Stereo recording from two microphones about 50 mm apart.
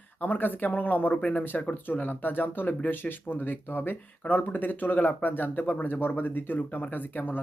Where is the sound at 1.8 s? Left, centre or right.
Left.